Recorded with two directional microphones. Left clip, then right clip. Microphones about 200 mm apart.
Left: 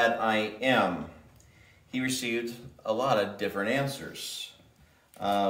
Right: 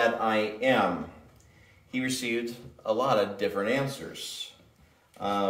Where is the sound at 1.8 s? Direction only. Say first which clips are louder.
Right 1 dB; 10° left (ahead or behind).